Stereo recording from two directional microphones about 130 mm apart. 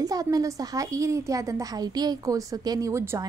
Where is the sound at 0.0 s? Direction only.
30° right (ahead or behind).